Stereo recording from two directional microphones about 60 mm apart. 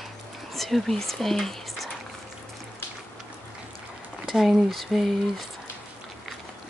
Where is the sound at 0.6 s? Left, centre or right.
Centre.